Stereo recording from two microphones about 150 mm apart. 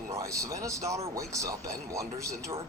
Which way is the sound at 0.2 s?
20° right (ahead or behind).